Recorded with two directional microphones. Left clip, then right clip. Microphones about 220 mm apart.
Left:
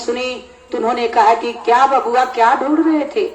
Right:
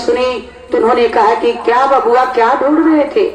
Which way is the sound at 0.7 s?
55° left (ahead or behind).